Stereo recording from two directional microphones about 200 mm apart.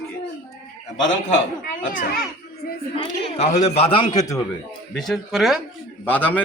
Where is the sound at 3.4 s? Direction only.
35° left (ahead or behind); by 4.4 s 15° left (ahead or behind).